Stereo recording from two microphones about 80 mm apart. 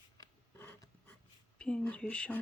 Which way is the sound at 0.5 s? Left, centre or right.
Left.